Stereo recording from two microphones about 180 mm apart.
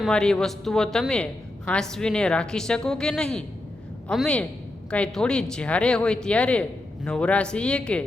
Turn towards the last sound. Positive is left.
turn(degrees=5)  # may be behind; listen again after turning